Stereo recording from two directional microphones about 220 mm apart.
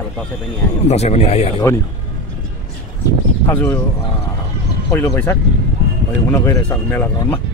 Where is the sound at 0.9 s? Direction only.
30° left (ahead or behind).